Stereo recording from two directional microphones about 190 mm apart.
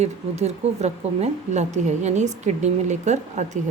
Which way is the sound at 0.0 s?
35° right (ahead or behind).